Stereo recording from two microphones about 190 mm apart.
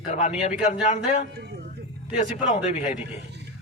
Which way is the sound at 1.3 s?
55° right (ahead or behind).